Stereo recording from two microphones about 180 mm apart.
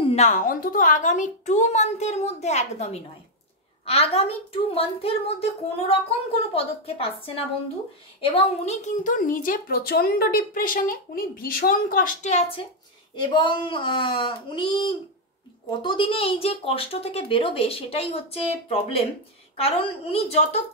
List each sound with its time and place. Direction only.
0.0 s a woman's voice: 40° left (ahead or behind)